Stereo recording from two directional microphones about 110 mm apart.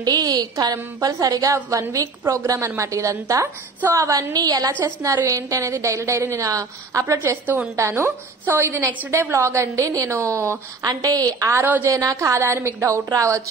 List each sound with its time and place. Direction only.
0.0 s a woman's voice: 40° right (ahead or behind)
10.8 s a woman's voice: 35° right (ahead or behind)